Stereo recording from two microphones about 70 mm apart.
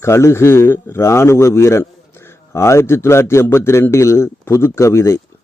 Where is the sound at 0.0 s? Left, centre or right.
Left.